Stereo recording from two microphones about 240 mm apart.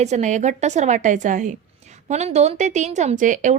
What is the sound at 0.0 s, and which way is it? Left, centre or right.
A woman's voice, right.